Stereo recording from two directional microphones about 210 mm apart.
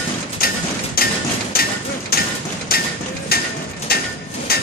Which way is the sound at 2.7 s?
45° left (ahead or behind).